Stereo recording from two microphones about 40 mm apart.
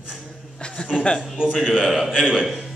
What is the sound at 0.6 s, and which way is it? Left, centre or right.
Chuckle, left.